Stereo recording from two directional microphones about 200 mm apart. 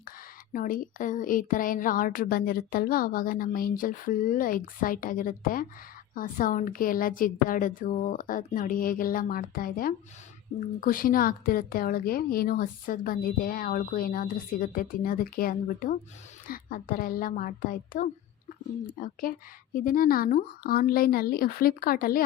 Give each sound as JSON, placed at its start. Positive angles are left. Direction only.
{"t": 0.5, "sound": "a woman's voice", "side_deg": 45}